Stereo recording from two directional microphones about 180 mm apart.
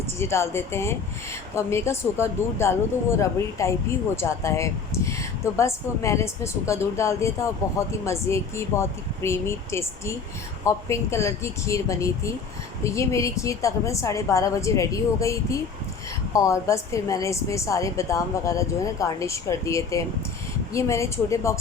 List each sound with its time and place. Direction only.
0.2 s speech: 15° left (ahead or behind)